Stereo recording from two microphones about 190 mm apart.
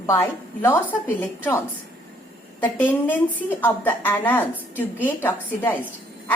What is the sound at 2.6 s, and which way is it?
A woman's voice, 10° left (ahead or behind).